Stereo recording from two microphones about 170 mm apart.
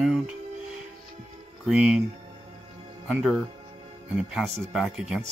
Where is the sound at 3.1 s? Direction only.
Centre (ahead or behind).